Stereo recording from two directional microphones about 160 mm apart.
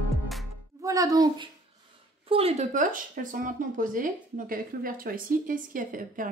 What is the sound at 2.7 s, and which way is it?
A woman's voice, 55° right (ahead or behind).